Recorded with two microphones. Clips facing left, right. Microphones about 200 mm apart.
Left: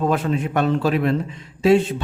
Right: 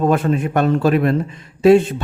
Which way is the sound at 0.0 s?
50° right (ahead or behind).